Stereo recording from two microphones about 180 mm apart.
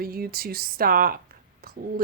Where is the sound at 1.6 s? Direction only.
55° right (ahead or behind).